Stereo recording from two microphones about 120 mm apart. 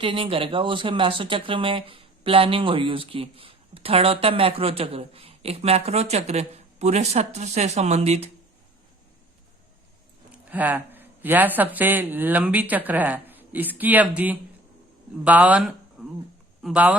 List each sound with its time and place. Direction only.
0.0 s speech: 45° right (ahead or behind); by 8.3 s 65° right (ahead or behind)
10.5 s speech: 15° right (ahead or behind)